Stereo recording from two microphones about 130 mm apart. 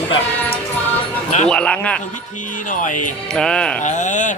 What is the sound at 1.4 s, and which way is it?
Speech, 5° left (ahead or behind).